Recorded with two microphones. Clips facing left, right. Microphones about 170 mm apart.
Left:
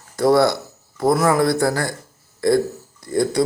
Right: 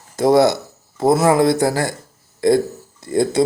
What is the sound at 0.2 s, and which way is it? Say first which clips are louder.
Speech: right 2 dB; 20° right (ahead or behind).